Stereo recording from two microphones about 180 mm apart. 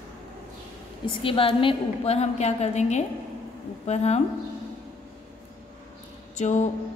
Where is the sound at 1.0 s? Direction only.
30° left (ahead or behind).